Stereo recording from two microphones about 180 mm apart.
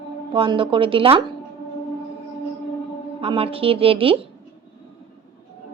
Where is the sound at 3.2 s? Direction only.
30° right (ahead or behind).